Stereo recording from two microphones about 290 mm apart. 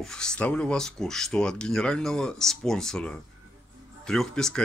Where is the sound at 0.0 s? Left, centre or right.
Centre.